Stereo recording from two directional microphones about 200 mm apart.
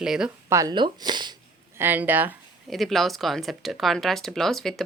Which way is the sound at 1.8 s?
10° right (ahead or behind).